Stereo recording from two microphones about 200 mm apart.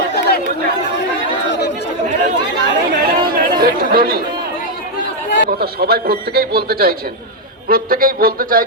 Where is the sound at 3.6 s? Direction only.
50° right (ahead or behind).